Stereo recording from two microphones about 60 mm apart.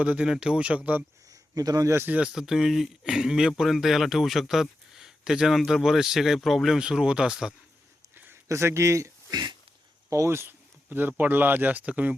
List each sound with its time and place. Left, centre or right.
0.0 s speech: centre
1.3 s a sound: right
2.2 s speech: centre
6.7 s speech: centre
8.1 s a sound: right
8.4 s speech: right